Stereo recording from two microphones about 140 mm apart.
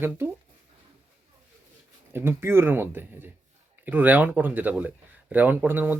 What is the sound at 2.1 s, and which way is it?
Speech, 15° right (ahead or behind).